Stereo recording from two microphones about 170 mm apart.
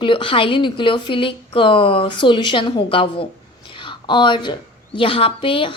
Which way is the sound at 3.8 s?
30° left (ahead or behind).